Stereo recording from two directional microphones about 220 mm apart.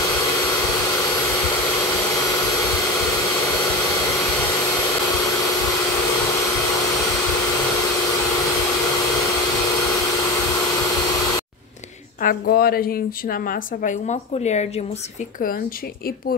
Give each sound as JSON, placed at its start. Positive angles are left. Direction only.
{"t": 12.2, "sound": "a woman's voice", "side_deg": 40}